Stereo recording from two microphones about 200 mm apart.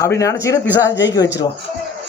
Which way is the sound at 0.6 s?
65° left (ahead or behind).